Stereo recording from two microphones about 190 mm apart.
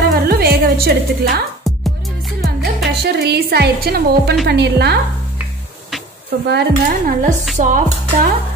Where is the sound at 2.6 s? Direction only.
Centre (ahead or behind).